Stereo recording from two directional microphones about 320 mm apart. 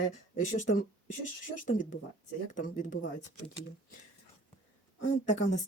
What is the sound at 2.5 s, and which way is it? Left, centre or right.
Speech, left.